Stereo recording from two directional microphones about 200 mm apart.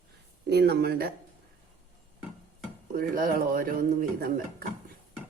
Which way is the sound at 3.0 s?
45° right (ahead or behind).